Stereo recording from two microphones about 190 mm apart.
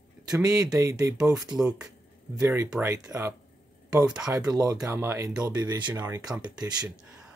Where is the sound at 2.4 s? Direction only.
15° right (ahead or behind).